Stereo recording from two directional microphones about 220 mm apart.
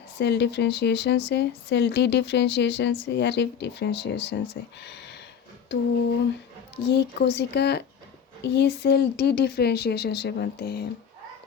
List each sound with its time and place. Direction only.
0.2 s speech: 50° left (ahead or behind)
6.8 s speech: 50° left (ahead or behind)